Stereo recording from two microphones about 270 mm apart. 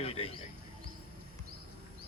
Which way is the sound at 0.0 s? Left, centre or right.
Left.